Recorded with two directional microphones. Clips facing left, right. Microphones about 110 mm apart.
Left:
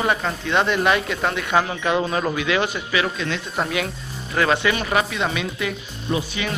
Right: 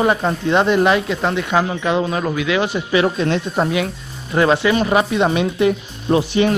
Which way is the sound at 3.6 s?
15° right (ahead or behind).